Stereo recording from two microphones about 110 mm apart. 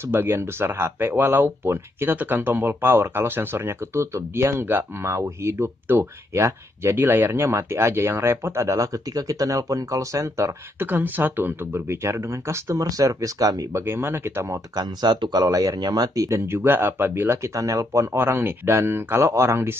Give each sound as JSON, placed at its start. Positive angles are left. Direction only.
{"t": 0.1, "sound": "speech", "side_deg": -20}
{"t": 10.9, "sound": "speech", "side_deg": -15}
{"t": 13.8, "sound": "speech", "side_deg": -20}
{"t": 14.8, "sound": "speech", "side_deg": -40}
{"t": 16.3, "sound": "speech", "side_deg": -20}